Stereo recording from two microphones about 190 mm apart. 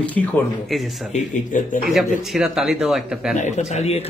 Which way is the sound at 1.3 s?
45° left (ahead or behind).